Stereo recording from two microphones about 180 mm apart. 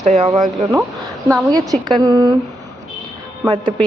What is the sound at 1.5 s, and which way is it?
Speech, 25° right (ahead or behind).